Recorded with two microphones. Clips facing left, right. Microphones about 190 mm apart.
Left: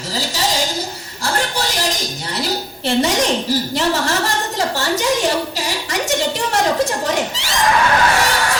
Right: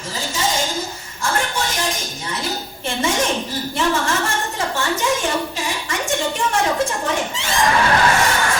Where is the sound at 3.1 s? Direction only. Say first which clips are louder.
Left 3 dB; 80° left.